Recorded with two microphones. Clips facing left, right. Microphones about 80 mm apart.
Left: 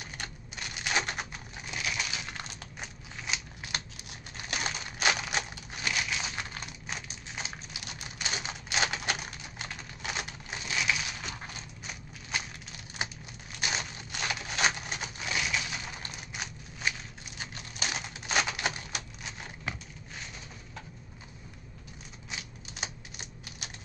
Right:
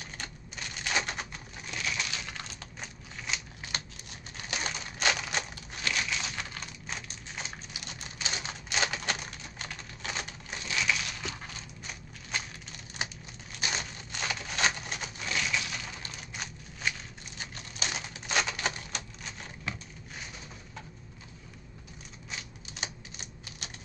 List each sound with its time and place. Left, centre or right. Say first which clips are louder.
0.0 s a sound: left 1 dB; centre
13.6 s crushing: left 1 dB; centre
17.4 s typewriter: left 1 dB; centre
22.3 s typewriter: even; centre